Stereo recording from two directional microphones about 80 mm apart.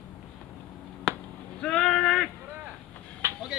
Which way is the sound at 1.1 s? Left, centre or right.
Centre.